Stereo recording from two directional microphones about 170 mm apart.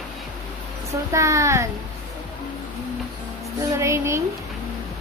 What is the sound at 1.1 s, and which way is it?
Speech, 20° right (ahead or behind).